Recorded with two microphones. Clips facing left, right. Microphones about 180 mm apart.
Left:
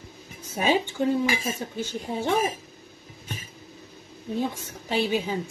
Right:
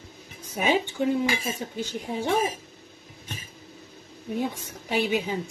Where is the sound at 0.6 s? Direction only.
15° right (ahead or behind).